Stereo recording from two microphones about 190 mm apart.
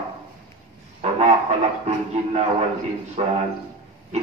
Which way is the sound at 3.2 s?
30° right (ahead or behind).